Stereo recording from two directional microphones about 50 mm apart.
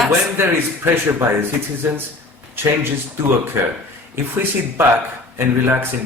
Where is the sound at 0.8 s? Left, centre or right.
Right.